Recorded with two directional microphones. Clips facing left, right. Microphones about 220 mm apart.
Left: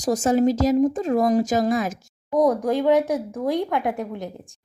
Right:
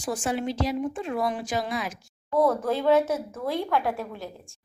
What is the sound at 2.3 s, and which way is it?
Speech, 15° left (ahead or behind).